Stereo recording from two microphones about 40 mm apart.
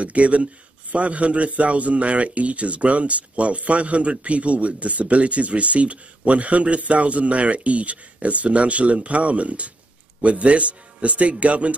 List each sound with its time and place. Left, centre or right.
0.0 s a man's voice: right